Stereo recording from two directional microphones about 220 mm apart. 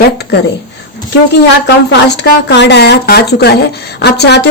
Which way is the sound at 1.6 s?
50° left (ahead or behind).